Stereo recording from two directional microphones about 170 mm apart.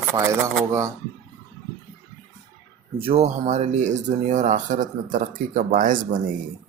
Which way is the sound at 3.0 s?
35° right (ahead or behind).